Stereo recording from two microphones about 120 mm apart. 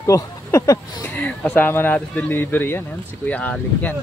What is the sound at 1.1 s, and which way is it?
Speech, 10° left (ahead or behind).